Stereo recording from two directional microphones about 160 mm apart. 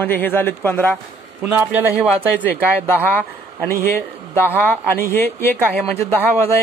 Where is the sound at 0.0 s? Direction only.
10° left (ahead or behind).